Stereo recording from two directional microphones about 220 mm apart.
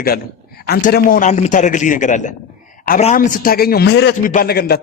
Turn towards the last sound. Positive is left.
turn(degrees=45)  # may be behind; listen again after turning